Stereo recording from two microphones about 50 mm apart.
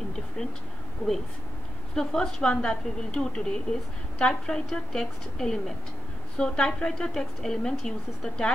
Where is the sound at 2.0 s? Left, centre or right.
Centre.